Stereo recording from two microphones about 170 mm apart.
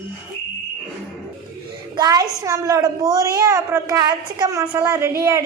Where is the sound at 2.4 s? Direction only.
20° right (ahead or behind).